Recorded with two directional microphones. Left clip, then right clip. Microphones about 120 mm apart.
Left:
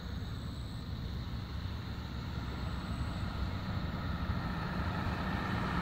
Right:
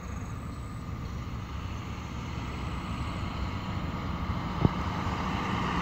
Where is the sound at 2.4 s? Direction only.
25° left (ahead or behind).